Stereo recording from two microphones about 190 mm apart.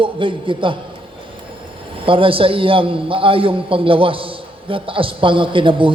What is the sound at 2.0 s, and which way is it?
A man's voice, 30° right (ahead or behind).